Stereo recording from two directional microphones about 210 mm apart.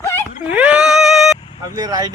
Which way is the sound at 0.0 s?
10° left (ahead or behind).